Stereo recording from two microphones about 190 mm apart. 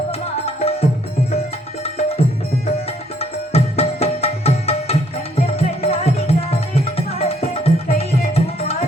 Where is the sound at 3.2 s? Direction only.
30° left (ahead or behind).